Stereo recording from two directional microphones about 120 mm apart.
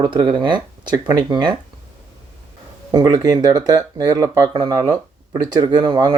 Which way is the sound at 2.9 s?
35° right (ahead or behind).